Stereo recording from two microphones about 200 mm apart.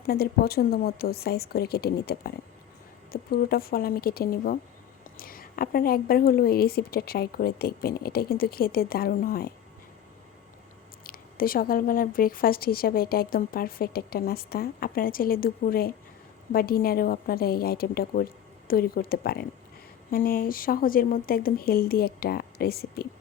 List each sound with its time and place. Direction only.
0.0 s speech: 50° left (ahead or behind)
11.0 s speech: 45° left (ahead or behind)